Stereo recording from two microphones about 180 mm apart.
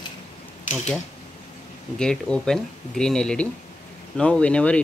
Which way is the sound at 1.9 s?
5° left (ahead or behind).